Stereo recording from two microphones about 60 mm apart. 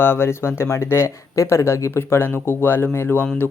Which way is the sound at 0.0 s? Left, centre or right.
Left.